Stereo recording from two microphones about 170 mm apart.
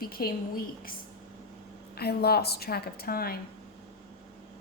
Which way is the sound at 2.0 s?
70° left (ahead or behind).